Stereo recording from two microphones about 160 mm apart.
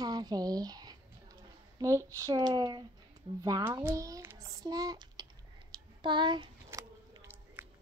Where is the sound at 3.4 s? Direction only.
25° right (ahead or behind).